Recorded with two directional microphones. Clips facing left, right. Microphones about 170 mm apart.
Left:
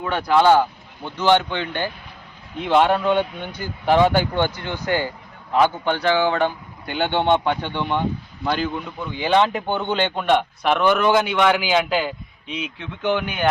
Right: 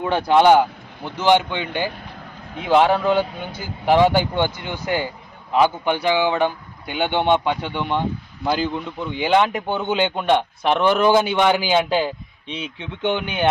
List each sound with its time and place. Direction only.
0.0 s a man's voice: 25° right (ahead or behind); by 8.7 s 5° right (ahead or behind)
8.7 s a man's voice: 25° right (ahead or behind)
9.3 s a man's voice: 10° right (ahead or behind)
10.2 s a man's voice: 15° right (ahead or behind)